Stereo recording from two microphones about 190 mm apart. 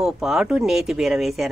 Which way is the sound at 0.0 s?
5° right (ahead or behind).